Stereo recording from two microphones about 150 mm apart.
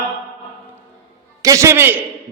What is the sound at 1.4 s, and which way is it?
Speech, 20° right (ahead or behind).